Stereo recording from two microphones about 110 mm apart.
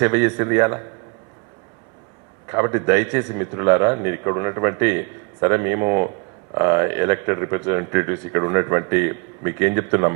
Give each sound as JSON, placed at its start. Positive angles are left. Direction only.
{"t": 0.0, "sound": "a man's voice", "side_deg": -20}
{"t": 2.5, "sound": "a man's voice", "side_deg": -30}